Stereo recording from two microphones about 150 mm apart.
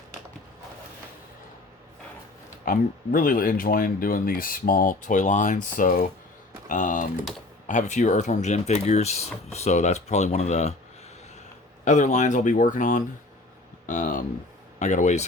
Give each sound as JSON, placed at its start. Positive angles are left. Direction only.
{"t": 2.6, "sound": "speech", "side_deg": 70}
{"t": 11.9, "sound": "speech", "side_deg": 55}